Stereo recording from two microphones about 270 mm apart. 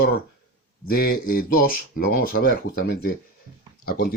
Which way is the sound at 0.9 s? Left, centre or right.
Left.